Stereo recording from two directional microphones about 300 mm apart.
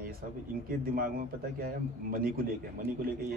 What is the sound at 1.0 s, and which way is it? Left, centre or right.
A man's voice, right.